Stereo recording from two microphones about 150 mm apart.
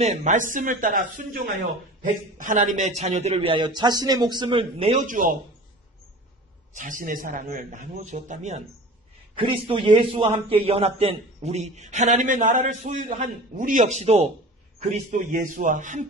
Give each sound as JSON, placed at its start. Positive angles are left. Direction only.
{"t": 0.0, "sound": "a man's voice", "side_deg": -50}
{"t": 4.5, "sound": "speech", "side_deg": -40}
{"t": 5.0, "sound": "a man's voice", "side_deg": -60}
{"t": 6.7, "sound": "a man's voice", "side_deg": -60}
{"t": 9.4, "sound": "a man's voice", "side_deg": -35}